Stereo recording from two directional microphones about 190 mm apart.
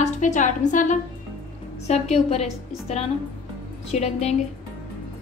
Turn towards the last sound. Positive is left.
turn(degrees=35)  # may be behind; listen again after turning